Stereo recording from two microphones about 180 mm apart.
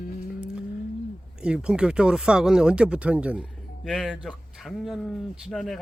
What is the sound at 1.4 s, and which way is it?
Speech, 5° right (ahead or behind).